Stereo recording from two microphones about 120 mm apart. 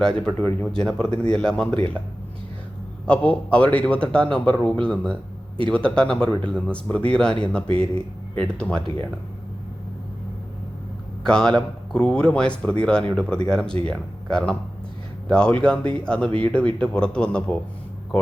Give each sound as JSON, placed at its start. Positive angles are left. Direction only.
{"t": 0.0, "sound": "speech", "side_deg": 5}
{"t": 0.3, "sound": "speech", "side_deg": 15}
{"t": 0.7, "sound": "speech", "side_deg": 5}
{"t": 3.1, "sound": "speech", "side_deg": 10}
{"t": 11.2, "sound": "speech", "side_deg": 5}